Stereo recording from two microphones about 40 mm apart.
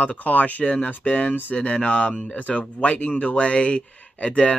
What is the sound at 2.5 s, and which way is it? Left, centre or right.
Speech, left.